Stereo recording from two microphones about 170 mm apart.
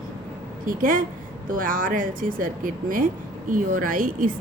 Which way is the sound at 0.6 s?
55° right (ahead or behind).